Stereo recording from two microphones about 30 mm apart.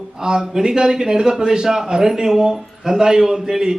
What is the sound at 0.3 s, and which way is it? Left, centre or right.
A man's voice, right.